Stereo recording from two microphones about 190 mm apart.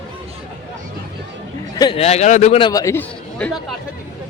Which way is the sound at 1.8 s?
30° left (ahead or behind).